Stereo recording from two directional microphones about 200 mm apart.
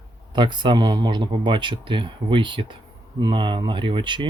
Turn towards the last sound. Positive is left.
turn(degrees=-25)  # may be behind; listen again after turning